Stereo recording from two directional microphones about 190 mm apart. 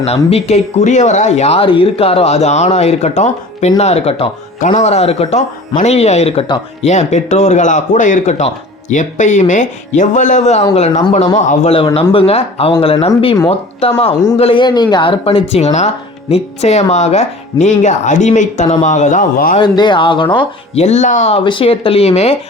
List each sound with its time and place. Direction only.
0.0 s a woman's voice: 35° left (ahead or behind)
19.5 s a woman's voice: 25° left (ahead or behind)
20.8 s speech: 40° left (ahead or behind)